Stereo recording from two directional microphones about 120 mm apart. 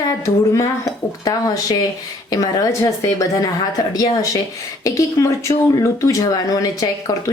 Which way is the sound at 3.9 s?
30° left (ahead or behind).